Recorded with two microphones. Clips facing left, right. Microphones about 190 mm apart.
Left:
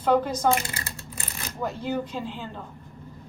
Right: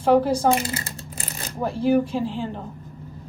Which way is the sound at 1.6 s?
30° right (ahead or behind).